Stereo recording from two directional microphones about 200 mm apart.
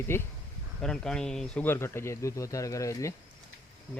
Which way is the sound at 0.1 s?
10° left (ahead or behind).